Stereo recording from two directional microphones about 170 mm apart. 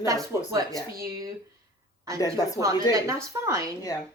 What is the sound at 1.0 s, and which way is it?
Speech, 20° right (ahead or behind).